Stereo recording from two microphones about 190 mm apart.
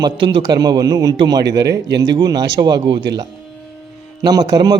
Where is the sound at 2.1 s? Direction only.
20° right (ahead or behind).